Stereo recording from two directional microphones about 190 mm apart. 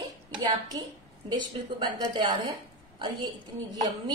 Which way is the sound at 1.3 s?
20° right (ahead or behind).